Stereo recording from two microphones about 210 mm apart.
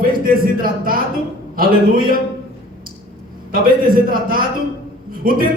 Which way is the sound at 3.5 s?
40° right (ahead or behind).